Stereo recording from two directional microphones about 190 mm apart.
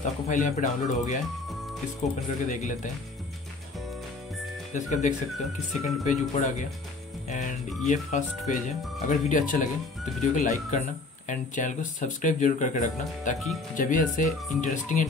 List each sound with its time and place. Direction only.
0.0 s speech: 40° left (ahead or behind)
4.7 s speech: 40° left (ahead or behind)